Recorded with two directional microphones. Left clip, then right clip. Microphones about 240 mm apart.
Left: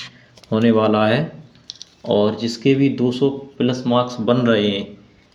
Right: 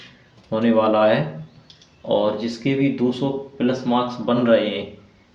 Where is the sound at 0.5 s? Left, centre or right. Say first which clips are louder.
Left 1 dB; left.